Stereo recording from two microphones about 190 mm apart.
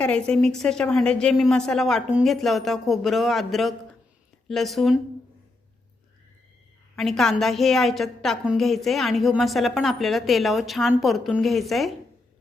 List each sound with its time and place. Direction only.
0.0 s a woman's voice: 5° left (ahead or behind)
6.9 s a woman's voice: centre (ahead or behind)